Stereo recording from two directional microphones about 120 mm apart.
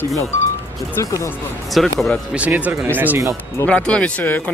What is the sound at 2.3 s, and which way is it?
Speech, 10° right (ahead or behind).